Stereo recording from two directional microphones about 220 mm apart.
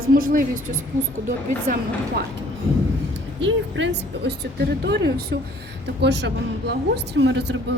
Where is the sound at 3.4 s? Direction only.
55° right (ahead or behind).